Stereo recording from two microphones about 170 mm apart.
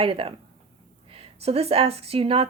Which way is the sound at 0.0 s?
35° right (ahead or behind).